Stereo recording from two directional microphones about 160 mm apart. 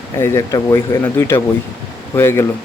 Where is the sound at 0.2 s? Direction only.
15° left (ahead or behind).